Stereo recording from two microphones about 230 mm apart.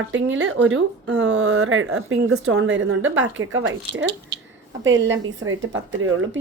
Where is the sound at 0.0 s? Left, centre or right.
Right.